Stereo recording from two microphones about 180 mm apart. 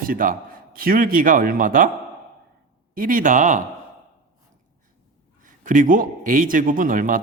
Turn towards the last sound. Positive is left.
turn(degrees=-50)  # may be behind; listen again after turning